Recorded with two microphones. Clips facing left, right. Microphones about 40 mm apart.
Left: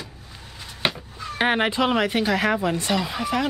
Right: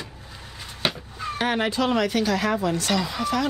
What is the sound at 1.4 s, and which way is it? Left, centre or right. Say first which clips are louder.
Speech: left 3 dB; left.